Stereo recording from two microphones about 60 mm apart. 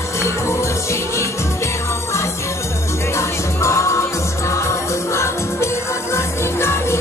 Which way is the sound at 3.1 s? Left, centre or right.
Left.